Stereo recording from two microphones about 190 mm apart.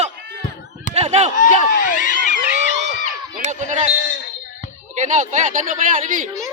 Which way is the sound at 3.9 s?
45° left (ahead or behind).